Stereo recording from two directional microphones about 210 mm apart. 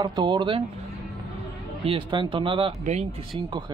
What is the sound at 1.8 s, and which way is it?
A man's voice, 25° right (ahead or behind).